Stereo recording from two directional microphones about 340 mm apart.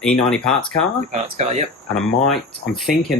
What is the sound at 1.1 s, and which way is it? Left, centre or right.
Speech, centre.